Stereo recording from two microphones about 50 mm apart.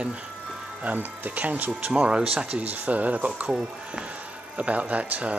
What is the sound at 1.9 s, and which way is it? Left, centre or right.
Speech, centre.